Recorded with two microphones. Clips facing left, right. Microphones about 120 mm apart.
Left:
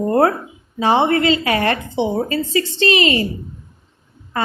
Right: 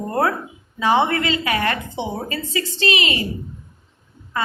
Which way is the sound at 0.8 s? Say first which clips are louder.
Left 3 dB; 30° left (ahead or behind).